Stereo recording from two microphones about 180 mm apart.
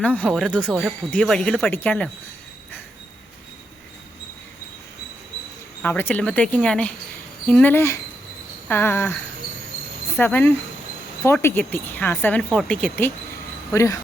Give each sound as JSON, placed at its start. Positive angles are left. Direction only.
{"t": 0.0, "sound": "speech", "side_deg": 10}
{"t": 5.8, "sound": "speech", "side_deg": 10}
{"t": 10.2, "sound": "speech", "side_deg": 10}